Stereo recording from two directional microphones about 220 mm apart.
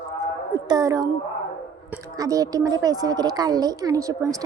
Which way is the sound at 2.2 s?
15° right (ahead or behind).